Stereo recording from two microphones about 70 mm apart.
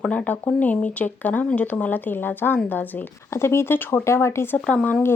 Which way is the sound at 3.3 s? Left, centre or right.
Left.